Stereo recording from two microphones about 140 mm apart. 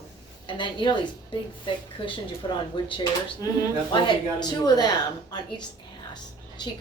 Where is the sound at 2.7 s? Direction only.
35° left (ahead or behind).